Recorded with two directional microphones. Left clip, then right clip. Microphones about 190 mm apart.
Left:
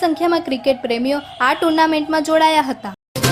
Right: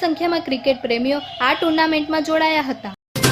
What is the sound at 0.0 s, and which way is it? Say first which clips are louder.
A woman's voice: left 3 dB; 25° left (ahead or behind).